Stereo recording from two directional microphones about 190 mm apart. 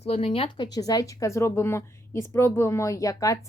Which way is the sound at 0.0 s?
30° left (ahead or behind).